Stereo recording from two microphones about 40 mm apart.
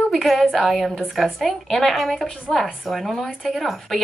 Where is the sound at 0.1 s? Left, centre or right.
Centre.